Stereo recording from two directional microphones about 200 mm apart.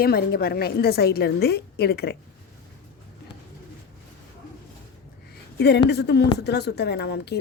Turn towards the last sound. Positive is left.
turn(degrees=55)  # may be behind; listen again after turning